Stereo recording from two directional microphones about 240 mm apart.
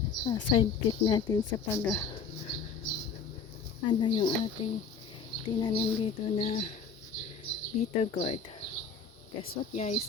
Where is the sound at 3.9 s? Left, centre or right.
Centre.